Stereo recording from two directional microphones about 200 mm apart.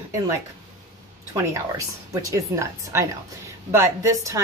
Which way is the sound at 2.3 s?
15° right (ahead or behind).